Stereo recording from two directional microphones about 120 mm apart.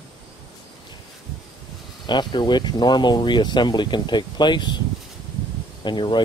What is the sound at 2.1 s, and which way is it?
Speech, 40° left (ahead or behind).